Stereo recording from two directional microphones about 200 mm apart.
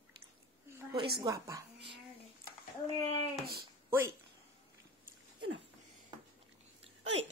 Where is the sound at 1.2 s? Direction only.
15° right (ahead or behind).